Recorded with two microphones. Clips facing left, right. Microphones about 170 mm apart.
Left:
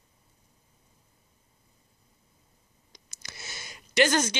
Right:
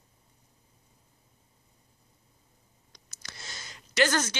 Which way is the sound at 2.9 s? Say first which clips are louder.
Left 1 dB; 10° left (ahead or behind).